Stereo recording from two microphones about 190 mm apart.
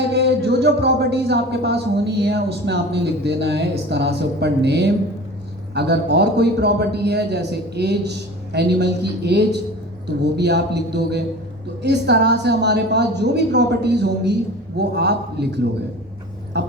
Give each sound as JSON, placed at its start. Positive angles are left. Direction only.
{"t": 0.1, "sound": "music", "side_deg": -60}